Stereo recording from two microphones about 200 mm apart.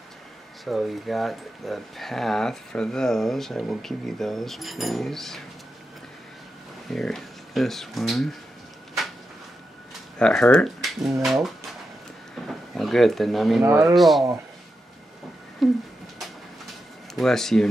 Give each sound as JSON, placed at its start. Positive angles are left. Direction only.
{"t": 0.7, "sound": "speech", "side_deg": 0}
{"t": 6.9, "sound": "speech", "side_deg": 0}
{"t": 10.1, "sound": "speech", "side_deg": 5}
{"t": 12.4, "sound": "a sound", "side_deg": 0}
{"t": 13.7, "sound": "speech", "side_deg": -15}
{"t": 13.9, "sound": "speech", "side_deg": 0}
{"t": 15.6, "sound": "speech", "side_deg": 0}
{"t": 17.1, "sound": "speech", "side_deg": 0}